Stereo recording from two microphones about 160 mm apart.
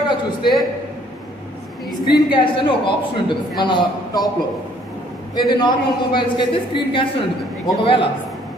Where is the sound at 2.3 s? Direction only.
30° left (ahead or behind).